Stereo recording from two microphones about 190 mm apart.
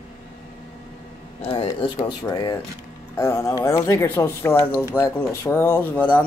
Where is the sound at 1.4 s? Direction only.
30° left (ahead or behind).